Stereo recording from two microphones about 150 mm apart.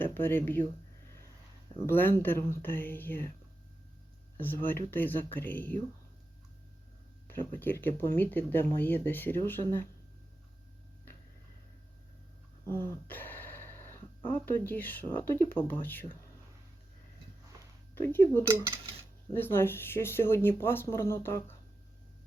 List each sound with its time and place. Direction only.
0.0 s speech: 15° left (ahead or behind)
1.9 s speech: 15° left (ahead or behind)
4.4 s speech: 15° left (ahead or behind)
7.3 s speech: 15° left (ahead or behind)
12.6 s dog: 15° left (ahead or behind)
14.3 s speech: 15° left (ahead or behind)
17.9 s speech: 15° left (ahead or behind)